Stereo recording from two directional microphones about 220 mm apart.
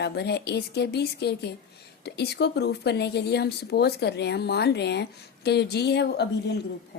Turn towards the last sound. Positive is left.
turn(degrees=50)  # may be behind; listen again after turning